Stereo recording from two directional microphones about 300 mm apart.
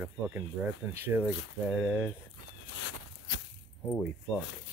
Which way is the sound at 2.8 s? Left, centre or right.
Left.